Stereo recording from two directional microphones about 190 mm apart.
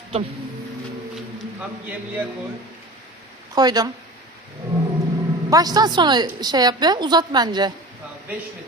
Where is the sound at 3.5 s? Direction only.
20° right (ahead or behind).